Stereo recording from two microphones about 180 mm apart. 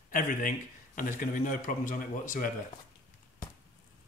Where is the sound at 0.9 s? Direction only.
50° left (ahead or behind).